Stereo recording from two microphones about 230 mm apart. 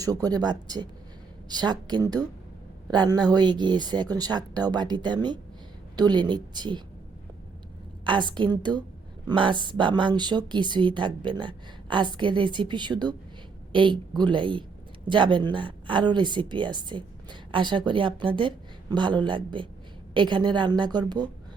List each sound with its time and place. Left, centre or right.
0.0 s a woman's voice: centre
8.0 s a woman's voice: centre